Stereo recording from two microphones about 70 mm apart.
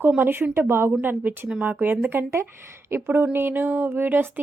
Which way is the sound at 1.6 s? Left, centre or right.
Right.